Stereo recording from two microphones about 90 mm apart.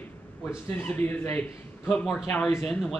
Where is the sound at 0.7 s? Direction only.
20° left (ahead or behind).